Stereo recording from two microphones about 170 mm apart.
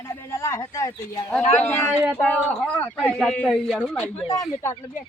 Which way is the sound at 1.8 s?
5° left (ahead or behind).